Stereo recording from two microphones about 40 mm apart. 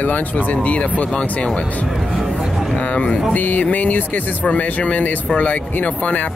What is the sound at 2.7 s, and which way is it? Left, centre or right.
Speech, left.